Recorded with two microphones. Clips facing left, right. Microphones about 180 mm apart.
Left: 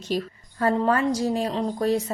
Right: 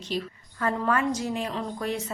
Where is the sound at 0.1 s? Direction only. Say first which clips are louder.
Left 4 dB; 45° left (ahead or behind).